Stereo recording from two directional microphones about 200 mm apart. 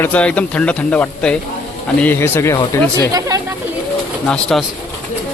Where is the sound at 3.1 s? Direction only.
15° right (ahead or behind).